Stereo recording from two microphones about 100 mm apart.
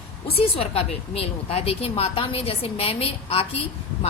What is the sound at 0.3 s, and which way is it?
A woman's voice, 80° left.